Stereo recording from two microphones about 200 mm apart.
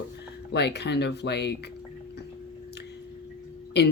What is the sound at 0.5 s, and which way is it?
Speech, 55° left (ahead or behind).